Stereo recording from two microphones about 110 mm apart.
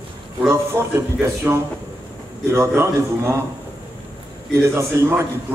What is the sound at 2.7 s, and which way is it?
Speech, 25° right (ahead or behind).